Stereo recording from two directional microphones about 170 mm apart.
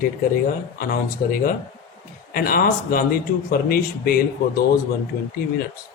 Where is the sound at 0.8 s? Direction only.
60° left (ahead or behind).